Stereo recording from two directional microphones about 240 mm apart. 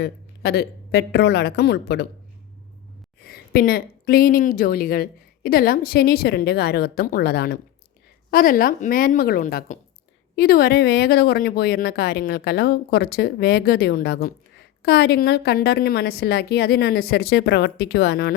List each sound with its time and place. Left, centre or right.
0.0 s a woman's voice: left
3.2 s speech: left